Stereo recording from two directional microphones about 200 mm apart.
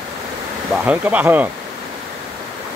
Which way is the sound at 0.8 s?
10° right (ahead or behind).